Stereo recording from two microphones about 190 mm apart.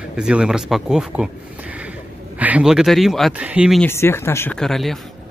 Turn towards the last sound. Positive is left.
turn(degrees=0)  # may be behind; listen again after turning